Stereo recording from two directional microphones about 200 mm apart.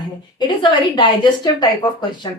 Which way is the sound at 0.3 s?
25° left (ahead or behind).